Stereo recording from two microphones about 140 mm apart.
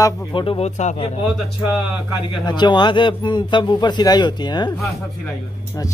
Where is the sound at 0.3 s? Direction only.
40° left (ahead or behind); by 0.9 s 55° left (ahead or behind).